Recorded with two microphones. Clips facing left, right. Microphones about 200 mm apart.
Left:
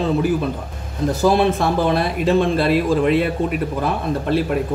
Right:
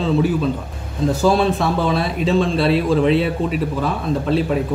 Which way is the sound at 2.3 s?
55° left (ahead or behind).